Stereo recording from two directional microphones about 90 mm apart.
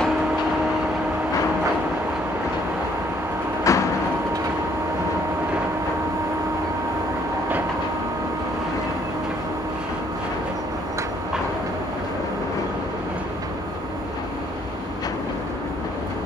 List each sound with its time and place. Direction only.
3.7 s vehicle: 35° left (ahead or behind)